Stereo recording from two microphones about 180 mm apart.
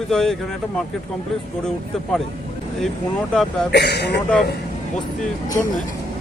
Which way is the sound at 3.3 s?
5° left (ahead or behind).